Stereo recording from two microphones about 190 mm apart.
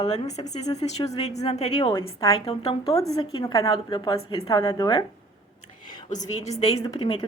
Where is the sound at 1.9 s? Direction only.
20° left (ahead or behind).